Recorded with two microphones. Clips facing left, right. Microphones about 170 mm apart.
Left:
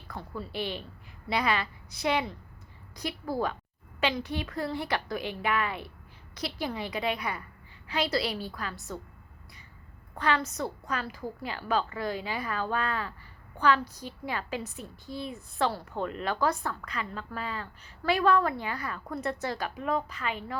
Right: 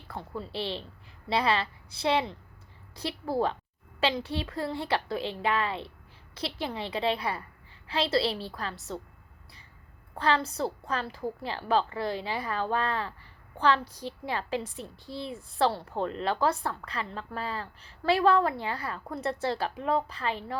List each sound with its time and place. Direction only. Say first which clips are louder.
0.1 s a woman's voice: right 1 dB; 25° right (ahead or behind)
10.2 s a woman's voice: right 2 dB; 30° right (ahead or behind)